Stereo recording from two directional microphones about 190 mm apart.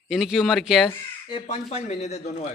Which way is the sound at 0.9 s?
25° left (ahead or behind).